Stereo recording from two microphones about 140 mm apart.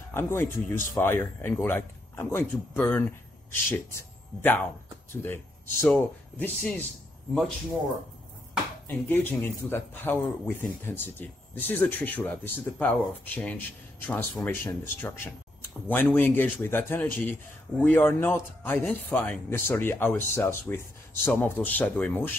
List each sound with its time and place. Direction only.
0.1 s a man's voice: 15° left (ahead or behind)
8.8 s a man's voice: 15° left (ahead or behind)